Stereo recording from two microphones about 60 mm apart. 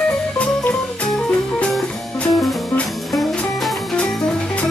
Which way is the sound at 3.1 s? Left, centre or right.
Centre.